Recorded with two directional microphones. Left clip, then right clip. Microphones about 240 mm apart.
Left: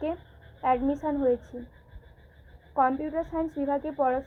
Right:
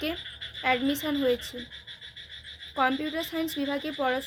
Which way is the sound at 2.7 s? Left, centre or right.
Right.